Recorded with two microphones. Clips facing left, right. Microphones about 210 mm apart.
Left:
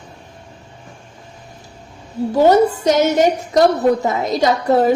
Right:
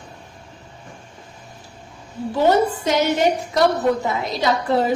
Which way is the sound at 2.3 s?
40° left (ahead or behind).